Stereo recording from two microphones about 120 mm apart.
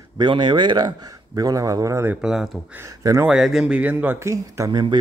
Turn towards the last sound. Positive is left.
turn(degrees=-25)  # may be behind; listen again after turning